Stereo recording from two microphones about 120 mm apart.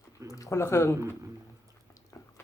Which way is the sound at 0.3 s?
25° left (ahead or behind).